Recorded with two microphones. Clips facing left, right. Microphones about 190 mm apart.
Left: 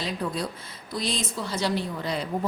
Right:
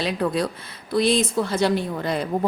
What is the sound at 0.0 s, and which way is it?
A woman's voice, 70° right (ahead or behind).